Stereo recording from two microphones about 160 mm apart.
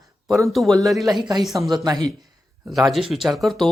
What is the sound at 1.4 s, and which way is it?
Speech, centre (ahead or behind).